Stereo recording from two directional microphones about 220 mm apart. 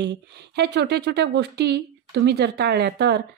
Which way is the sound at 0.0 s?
50° right (ahead or behind).